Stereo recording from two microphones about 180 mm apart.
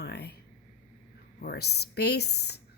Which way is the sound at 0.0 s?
65° left (ahead or behind).